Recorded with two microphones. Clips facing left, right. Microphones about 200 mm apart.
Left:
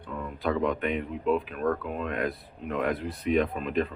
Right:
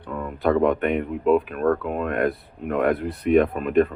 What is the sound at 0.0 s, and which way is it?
Speech, 55° right (ahead or behind).